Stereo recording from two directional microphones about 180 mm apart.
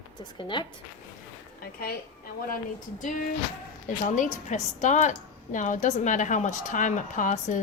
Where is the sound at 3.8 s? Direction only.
45° left (ahead or behind).